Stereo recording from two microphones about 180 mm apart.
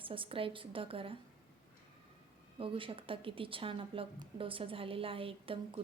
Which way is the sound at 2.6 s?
30° right (ahead or behind).